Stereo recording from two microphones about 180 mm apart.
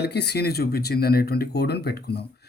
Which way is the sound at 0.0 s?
65° left (ahead or behind).